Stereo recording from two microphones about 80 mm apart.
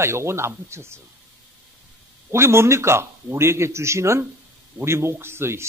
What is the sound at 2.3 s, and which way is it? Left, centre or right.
Speech, right.